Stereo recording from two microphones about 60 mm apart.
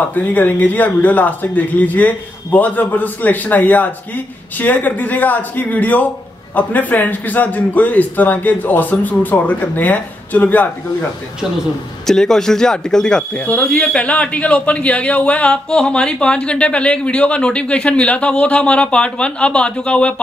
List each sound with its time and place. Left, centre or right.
0.1 s speech: left
12.1 s speech: centre
13.4 s speech: left